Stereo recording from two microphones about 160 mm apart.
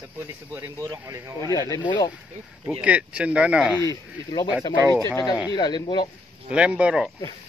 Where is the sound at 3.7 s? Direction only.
20° left (ahead or behind).